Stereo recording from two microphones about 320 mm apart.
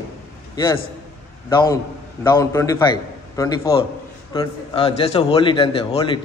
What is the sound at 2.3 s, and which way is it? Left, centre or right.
A man's voice, centre.